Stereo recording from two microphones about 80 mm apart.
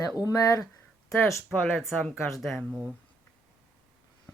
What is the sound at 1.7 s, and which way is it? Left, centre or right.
Speech, centre.